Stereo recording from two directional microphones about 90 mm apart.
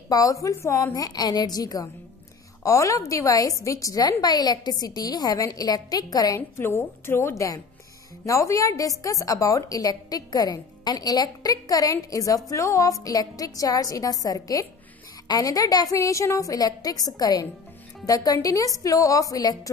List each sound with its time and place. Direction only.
0.1 s a woman's voice: 40° left (ahead or behind)
6.5 s a woman's voice: 25° left (ahead or behind); by 19.7 s 45° left (ahead or behind)